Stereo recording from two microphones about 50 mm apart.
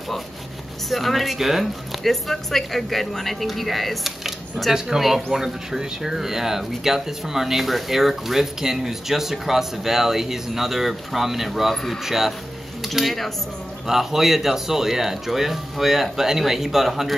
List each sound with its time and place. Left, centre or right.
0.8 s a woman's voice: centre
11.7 s speech: centre
12.0 s a woman's voice: centre